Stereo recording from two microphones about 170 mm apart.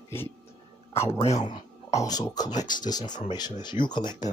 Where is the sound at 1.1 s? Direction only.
40° left (ahead or behind).